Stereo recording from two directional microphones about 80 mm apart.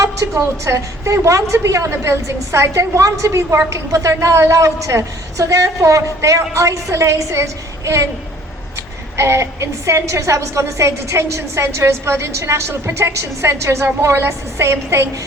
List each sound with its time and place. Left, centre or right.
0.0 s a woman's voice: right
9.1 s a woman's voice: right